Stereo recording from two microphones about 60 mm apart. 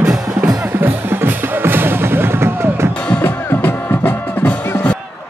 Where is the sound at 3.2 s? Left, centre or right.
Left.